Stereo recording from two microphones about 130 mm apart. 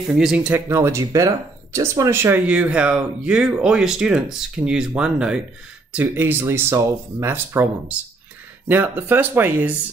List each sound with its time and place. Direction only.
0.1 s speech: 5° right (ahead or behind)
0.5 s speech: 15° right (ahead or behind)
2.4 s speech: 10° right (ahead or behind)